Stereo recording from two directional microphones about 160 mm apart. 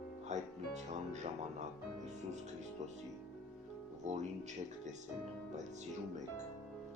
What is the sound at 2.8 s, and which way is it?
Speech, 45° right (ahead or behind).